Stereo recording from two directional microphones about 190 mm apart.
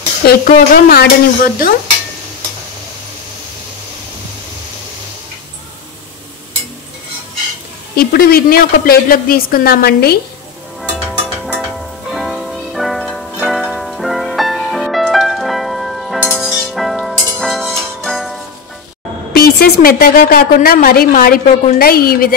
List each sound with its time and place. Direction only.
0.5 s a woman's voice: 50° left (ahead or behind)
7.9 s a woman's voice: 50° left (ahead or behind)
10.8 s music: centre (ahead or behind)
19.3 s a woman's voice: 50° left (ahead or behind)